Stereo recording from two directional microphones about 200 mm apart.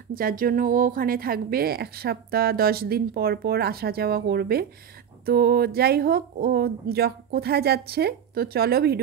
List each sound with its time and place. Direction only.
0.1 s speech: 45° right (ahead or behind)